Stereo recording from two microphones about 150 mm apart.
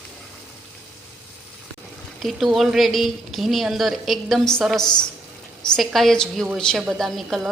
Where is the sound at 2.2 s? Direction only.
Centre (ahead or behind).